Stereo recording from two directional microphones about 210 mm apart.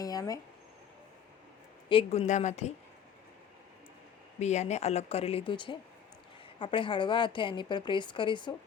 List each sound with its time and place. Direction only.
0.0 s a sound: 15° left (ahead or behind)
1.9 s speech: 30° left (ahead or behind)
4.4 s a woman's voice: 35° left (ahead or behind)